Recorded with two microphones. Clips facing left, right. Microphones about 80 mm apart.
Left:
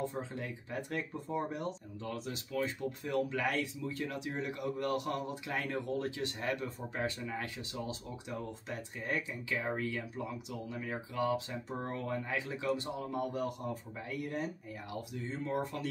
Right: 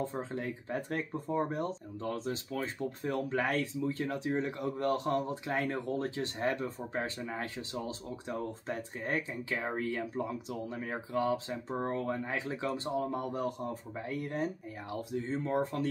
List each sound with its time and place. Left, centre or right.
0.1 s speech: right